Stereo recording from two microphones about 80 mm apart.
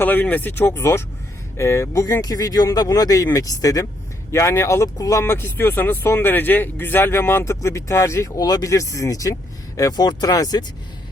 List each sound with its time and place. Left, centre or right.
0.0 s speech: left
4.3 s speech: left
5.2 s speech: left
9.9 s speech: left